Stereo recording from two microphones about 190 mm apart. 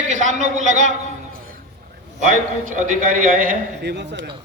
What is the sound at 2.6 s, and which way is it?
A man's voice, 45° right (ahead or behind).